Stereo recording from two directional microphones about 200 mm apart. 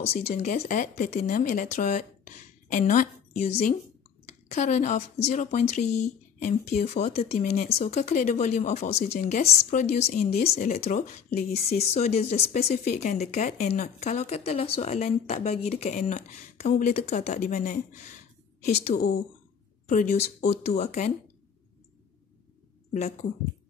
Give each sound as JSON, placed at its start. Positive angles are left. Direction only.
{"t": 0.0, "sound": "speech", "side_deg": 35}
{"t": 10.4, "sound": "speech", "side_deg": 50}
{"t": 10.8, "sound": "speech", "side_deg": 40}
{"t": 18.9, "sound": "speech", "side_deg": 50}
{"t": 19.9, "sound": "speech", "side_deg": 35}